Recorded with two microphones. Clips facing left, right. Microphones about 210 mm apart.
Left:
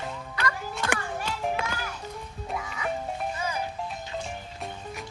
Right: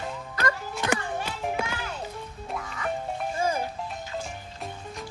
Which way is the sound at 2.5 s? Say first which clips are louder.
Left 1 dB; centre (ahead or behind).